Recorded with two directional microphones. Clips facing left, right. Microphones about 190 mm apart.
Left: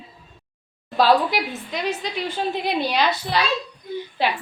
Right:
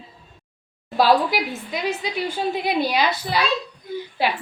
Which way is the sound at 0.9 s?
10° right (ahead or behind).